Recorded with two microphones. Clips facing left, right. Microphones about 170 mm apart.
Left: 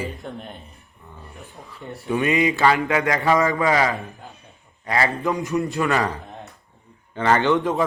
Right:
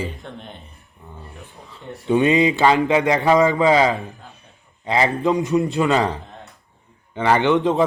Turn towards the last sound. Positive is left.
turn(degrees=-20)  # may be behind; listen again after turning